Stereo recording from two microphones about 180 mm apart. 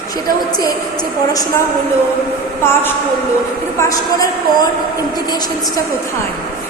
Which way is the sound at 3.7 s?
20° left (ahead or behind).